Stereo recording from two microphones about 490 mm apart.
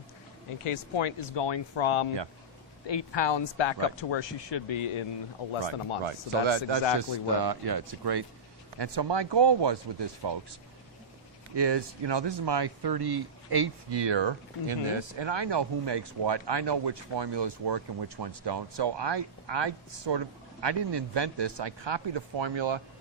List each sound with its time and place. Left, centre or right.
0.6 s speech: left
2.8 s speech: left
5.4 s speech: left
6.1 s speech: right
7.4 s speech: right
11.5 s speech: right